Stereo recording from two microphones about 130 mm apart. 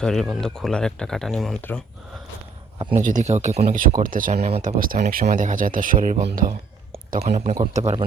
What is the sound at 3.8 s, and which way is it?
Speech, 90° right.